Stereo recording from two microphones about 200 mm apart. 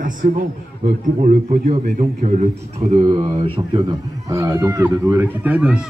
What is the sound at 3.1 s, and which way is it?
Speech, 25° right (ahead or behind).